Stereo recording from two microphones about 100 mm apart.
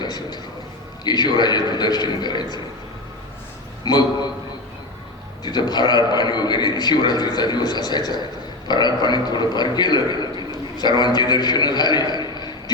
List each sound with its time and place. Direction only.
0.0 s a man's voice: 45° left (ahead or behind)
3.8 s a man's voice: 45° left (ahead or behind)
5.4 s a man's voice: 45° left (ahead or behind)
12.3 s a sound: 45° left (ahead or behind)